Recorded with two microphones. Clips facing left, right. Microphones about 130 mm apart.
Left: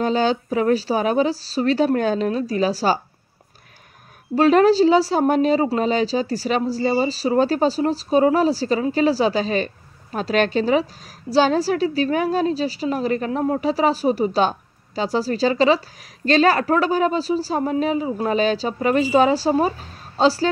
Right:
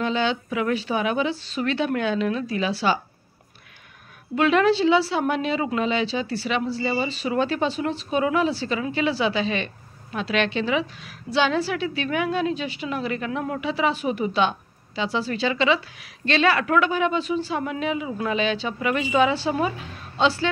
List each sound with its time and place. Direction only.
0.0 s a woman's voice: 40° left (ahead or behind)
4.4 s a woman's voice: 40° left (ahead or behind)